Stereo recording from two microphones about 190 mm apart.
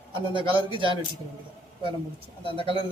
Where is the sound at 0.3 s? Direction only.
25° right (ahead or behind).